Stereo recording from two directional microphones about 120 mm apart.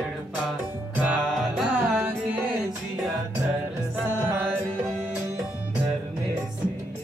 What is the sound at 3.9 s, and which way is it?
Music, 15° right (ahead or behind).